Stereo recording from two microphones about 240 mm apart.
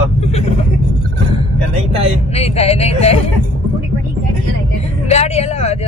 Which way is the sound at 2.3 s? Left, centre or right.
Left.